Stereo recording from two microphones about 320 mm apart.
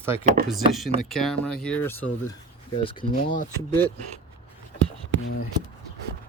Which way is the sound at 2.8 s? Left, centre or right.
Left.